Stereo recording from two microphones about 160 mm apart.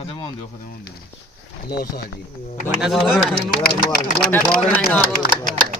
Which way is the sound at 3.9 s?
65° left (ahead or behind).